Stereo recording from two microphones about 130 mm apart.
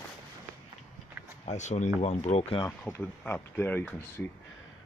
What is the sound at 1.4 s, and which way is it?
Speech, 60° left (ahead or behind).